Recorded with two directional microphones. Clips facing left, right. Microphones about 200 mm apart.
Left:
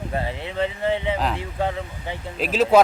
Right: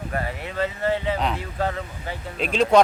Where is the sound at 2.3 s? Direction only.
5° left (ahead or behind).